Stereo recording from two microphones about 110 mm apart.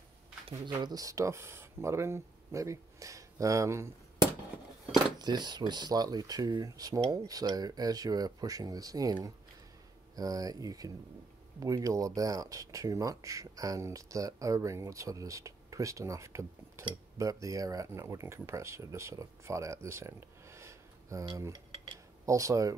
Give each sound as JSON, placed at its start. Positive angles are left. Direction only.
{"t": 0.7, "sound": "speech", "side_deg": -40}
{"t": 5.2, "sound": "speech", "side_deg": -40}